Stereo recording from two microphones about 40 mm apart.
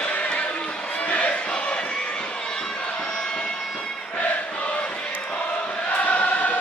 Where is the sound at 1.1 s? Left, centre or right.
Left.